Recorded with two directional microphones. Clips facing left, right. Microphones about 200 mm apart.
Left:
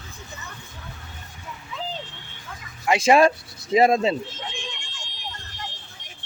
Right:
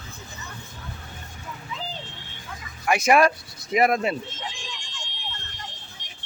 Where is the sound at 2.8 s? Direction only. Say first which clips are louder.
Left 2 dB; 25° left (ahead or behind).